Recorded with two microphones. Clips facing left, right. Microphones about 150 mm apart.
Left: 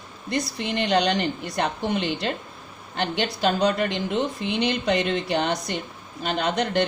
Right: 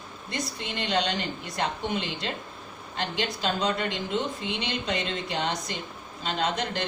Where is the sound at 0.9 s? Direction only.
70° left (ahead or behind).